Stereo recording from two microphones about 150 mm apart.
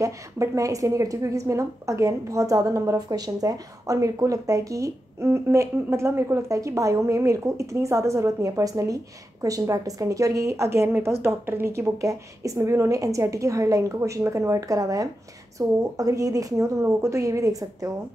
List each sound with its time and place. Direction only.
0.0 s a woman's voice: 20° right (ahead or behind)